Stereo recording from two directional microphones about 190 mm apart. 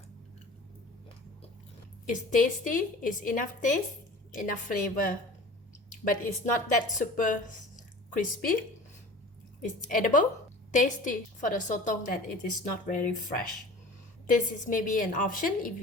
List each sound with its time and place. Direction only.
2.0 s a woman's voice: 45° left (ahead or behind)
9.6 s a woman's voice: 45° left (ahead or behind)
14.7 s a woman's voice: 45° left (ahead or behind)